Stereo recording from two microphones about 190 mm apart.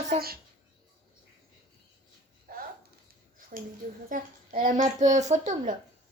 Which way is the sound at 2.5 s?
50° right (ahead or behind).